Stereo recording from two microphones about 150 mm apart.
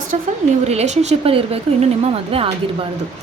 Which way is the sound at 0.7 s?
45° right (ahead or behind).